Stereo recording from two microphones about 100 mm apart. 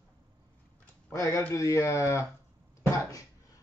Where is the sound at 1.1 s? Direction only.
30° left (ahead or behind).